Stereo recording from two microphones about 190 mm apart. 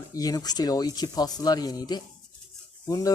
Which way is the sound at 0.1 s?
20° left (ahead or behind).